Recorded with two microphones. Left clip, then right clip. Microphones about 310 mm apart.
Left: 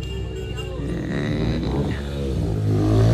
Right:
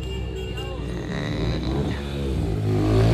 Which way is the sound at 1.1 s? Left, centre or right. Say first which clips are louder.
Left 2 dB; right.